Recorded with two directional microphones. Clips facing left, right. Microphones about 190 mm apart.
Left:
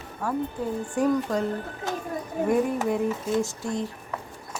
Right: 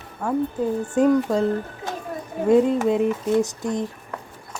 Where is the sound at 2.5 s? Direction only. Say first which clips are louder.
Right 7 dB; 20° right (ahead or behind).